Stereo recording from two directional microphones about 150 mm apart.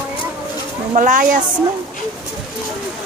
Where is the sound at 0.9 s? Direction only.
60° right (ahead or behind).